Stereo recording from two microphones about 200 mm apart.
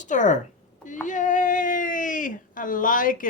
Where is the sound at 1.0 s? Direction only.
40° left (ahead or behind).